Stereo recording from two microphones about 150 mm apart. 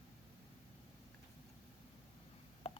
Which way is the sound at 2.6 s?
40° left (ahead or behind).